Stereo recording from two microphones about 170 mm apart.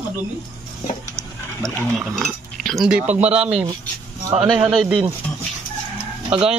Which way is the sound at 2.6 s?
Centre (ahead or behind).